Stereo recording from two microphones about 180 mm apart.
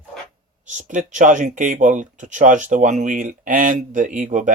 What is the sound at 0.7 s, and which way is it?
Speech, 45° right (ahead or behind).